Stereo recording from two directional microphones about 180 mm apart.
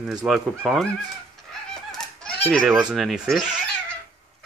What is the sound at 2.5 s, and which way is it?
A man's voice, 5° left (ahead or behind).